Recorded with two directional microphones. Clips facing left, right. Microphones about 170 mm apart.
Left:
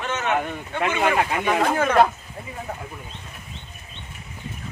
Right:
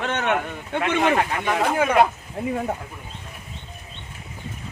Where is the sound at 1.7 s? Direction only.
10° right (ahead or behind).